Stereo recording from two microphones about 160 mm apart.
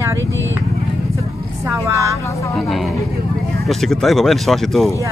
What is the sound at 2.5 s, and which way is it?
Speech, centre (ahead or behind).